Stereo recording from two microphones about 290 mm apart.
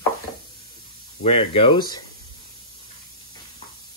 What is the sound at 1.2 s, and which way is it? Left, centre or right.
Speech, left.